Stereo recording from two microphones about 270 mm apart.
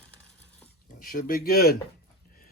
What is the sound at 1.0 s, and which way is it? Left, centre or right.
Speech, left.